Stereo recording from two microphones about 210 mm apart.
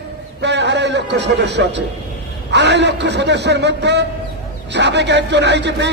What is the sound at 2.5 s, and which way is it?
A man's voice, 55° right (ahead or behind).